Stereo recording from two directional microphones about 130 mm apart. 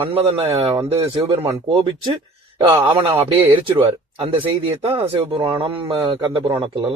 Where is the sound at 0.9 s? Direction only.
45° right (ahead or behind).